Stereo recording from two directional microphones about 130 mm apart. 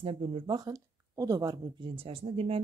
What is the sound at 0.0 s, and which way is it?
Speech, 45° right (ahead or behind).